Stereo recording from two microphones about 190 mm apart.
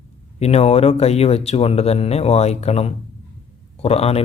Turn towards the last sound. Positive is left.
turn(degrees=30)  # may be behind; listen again after turning